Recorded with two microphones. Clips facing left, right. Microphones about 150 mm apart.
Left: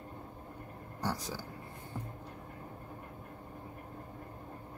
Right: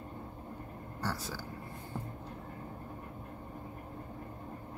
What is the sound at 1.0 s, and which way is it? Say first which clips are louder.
Speech: left 2 dB; 15° left (ahead or behind).